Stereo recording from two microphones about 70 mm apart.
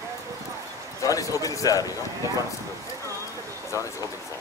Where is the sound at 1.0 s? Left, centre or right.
Left.